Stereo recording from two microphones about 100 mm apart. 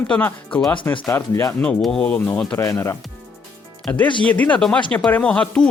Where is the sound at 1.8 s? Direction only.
5° left (ahead or behind).